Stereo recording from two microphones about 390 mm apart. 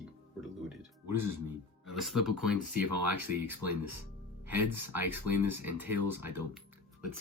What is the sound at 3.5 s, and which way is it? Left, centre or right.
Speech, right.